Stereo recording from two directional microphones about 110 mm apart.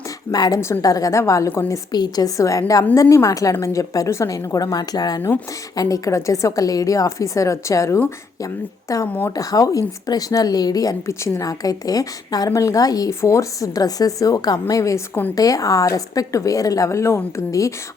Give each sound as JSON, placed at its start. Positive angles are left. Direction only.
{"t": 0.3, "sound": "a woman's voice", "side_deg": 35}
{"t": 1.9, "sound": "a woman's voice", "side_deg": 40}
{"t": 9.0, "sound": "speech", "side_deg": 15}
{"t": 9.3, "sound": "a woman's voice", "side_deg": 30}